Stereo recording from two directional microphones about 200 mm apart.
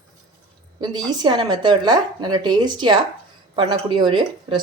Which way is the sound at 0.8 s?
20° right (ahead or behind).